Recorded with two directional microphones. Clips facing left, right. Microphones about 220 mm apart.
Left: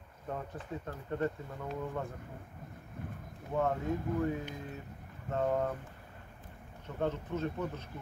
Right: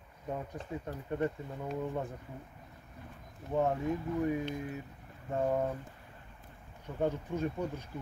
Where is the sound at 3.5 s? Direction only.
15° right (ahead or behind).